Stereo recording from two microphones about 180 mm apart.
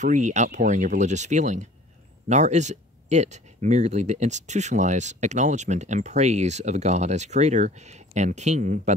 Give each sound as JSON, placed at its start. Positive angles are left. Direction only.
{"t": 0.0, "sound": "speech", "side_deg": -40}